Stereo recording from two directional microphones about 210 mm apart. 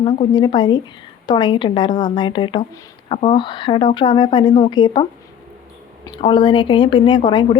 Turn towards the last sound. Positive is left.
turn(degrees=20)  # may be behind; listen again after turning